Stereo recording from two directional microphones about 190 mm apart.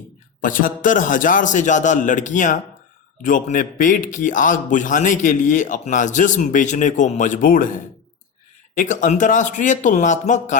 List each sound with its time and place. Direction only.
0.4 s a man's voice: 45° left (ahead or behind)